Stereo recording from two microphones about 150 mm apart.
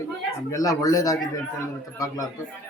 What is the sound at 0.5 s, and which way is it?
Speech, 25° left (ahead or behind).